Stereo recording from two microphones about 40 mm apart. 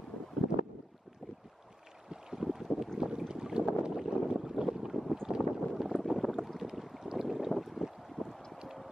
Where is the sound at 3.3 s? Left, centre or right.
Centre.